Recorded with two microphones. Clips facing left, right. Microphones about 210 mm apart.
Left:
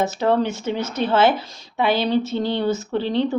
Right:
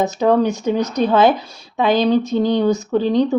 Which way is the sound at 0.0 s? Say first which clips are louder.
Right 4 dB; 15° right (ahead or behind).